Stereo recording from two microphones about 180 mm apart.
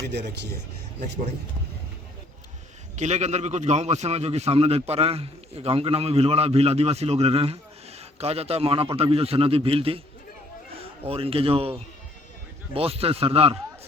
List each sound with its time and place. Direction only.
2.9 s a man's voice: 40° right (ahead or behind)